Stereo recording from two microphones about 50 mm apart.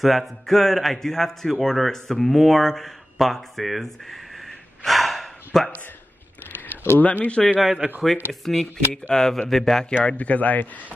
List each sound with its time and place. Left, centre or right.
0.0 s speech: centre
7.0 s speech: left
8.0 s speech: centre
10.0 s speech: left